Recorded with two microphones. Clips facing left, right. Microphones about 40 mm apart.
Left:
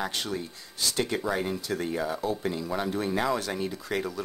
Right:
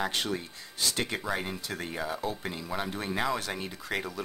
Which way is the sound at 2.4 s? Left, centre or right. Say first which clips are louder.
Left 4 dB; right.